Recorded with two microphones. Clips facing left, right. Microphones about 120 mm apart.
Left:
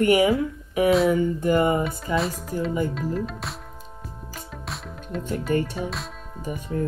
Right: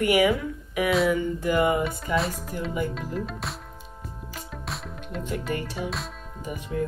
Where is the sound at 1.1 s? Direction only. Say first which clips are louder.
Left 3 dB; 40° left (ahead or behind).